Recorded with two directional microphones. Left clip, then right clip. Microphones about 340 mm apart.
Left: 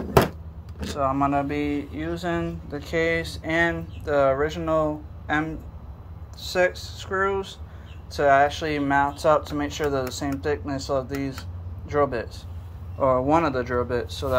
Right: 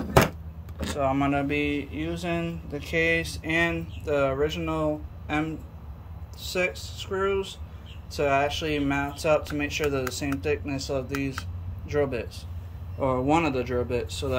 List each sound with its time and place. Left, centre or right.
0.9 s speech: centre
1.8 s speech: centre
2.0 s speech: centre